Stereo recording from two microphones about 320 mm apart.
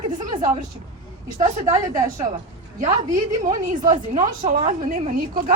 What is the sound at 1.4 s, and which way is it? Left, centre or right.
Speech, centre.